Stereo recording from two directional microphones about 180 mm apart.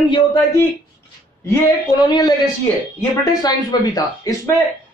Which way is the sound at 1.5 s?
20° left (ahead or behind).